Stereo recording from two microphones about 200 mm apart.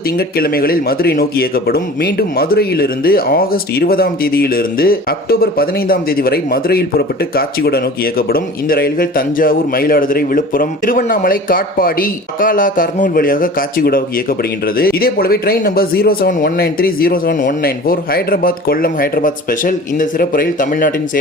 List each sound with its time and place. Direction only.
0.2 s speech: 50° left (ahead or behind)